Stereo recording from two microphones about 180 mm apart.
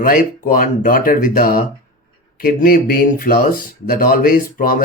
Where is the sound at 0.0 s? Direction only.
50° left (ahead or behind).